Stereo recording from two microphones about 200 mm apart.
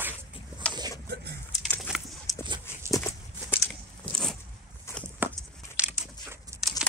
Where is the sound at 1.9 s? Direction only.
5° right (ahead or behind).